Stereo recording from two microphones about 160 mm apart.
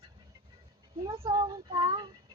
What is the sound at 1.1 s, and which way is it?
Child singing, 30° right (ahead or behind).